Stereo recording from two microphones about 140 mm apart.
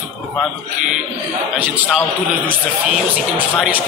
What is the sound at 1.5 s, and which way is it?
Speech, 10° right (ahead or behind).